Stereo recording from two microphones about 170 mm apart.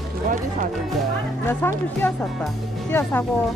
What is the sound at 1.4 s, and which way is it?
Speech, 10° left (ahead or behind).